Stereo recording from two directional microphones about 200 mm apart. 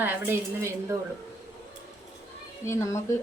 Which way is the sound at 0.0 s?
10° right (ahead or behind).